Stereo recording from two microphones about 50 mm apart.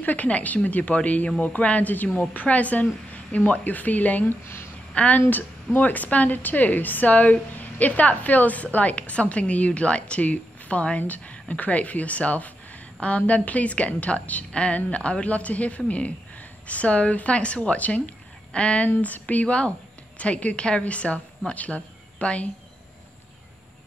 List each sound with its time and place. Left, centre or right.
0.0 s a woman's voice: left